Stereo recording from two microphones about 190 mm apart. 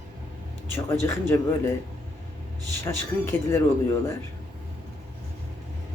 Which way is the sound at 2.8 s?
15° left (ahead or behind).